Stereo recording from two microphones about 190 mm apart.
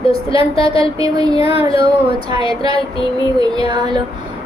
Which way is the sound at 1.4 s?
30° left (ahead or behind).